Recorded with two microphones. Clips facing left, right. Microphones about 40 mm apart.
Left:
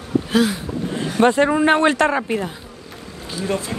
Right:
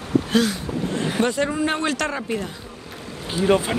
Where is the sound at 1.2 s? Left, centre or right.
Left.